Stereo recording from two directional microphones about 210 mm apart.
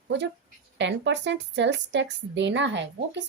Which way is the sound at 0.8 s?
60° right (ahead or behind).